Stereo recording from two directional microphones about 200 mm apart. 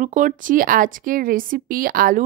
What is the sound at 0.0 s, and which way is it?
Speech, 40° right (ahead or behind).